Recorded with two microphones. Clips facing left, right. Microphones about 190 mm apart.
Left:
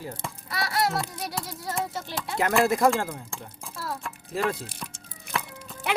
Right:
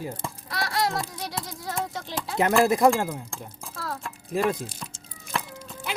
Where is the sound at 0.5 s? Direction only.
5° left (ahead or behind).